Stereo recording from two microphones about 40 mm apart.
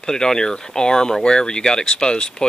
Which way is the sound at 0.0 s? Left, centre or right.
Centre.